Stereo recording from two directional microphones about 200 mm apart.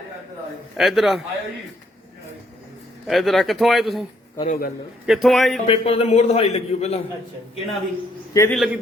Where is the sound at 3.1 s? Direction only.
Centre (ahead or behind).